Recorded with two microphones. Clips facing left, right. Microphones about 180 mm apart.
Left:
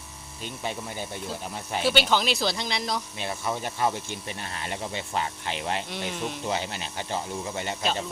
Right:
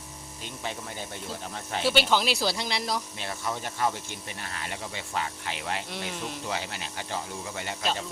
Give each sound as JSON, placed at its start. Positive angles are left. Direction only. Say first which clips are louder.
{"t": 0.6, "sound": "speech", "louder": "left 3 dB", "side_deg": 15}
{"t": 1.9, "sound": "speech", "louder": "even", "side_deg": 0}
{"t": 3.2, "sound": "speech", "louder": "left 3 dB", "side_deg": 15}
{"t": 5.9, "sound": "speech", "louder": "left 3 dB", "side_deg": 0}
{"t": 6.5, "sound": "speech", "louder": "left 3 dB", "side_deg": 20}